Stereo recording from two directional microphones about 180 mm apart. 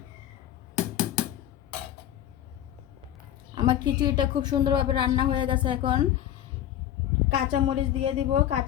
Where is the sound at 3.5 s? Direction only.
25° right (ahead or behind).